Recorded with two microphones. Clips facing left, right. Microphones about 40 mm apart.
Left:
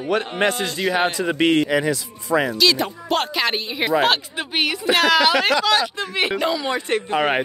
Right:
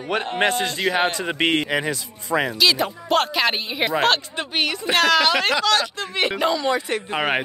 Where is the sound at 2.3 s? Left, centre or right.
Centre.